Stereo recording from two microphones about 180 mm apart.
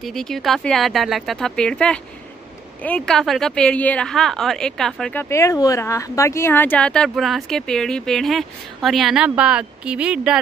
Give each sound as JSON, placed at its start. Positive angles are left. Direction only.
{"t": 0.0, "sound": "speech", "side_deg": 0}
{"t": 5.3, "sound": "speech", "side_deg": 15}